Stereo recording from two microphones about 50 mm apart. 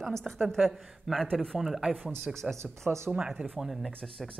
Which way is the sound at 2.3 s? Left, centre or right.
Centre.